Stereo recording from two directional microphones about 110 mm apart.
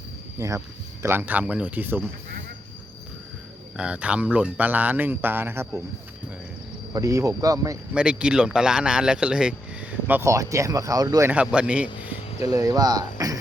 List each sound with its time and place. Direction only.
0.3 s speech: 30° right (ahead or behind)
1.0 s speech: 20° right (ahead or behind)
3.8 s speech: 10° right (ahead or behind)
6.9 s speech: 30° right (ahead or behind)
7.9 s speech: 10° right (ahead or behind)
10.2 s speech: 30° right (ahead or behind)
11.3 s speech: 10° right (ahead or behind)
12.4 s speech: 35° right (ahead or behind)